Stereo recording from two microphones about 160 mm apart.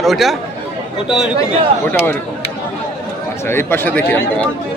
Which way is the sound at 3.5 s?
15° left (ahead or behind).